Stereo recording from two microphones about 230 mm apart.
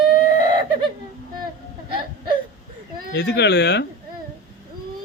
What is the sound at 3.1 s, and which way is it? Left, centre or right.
Speech, left.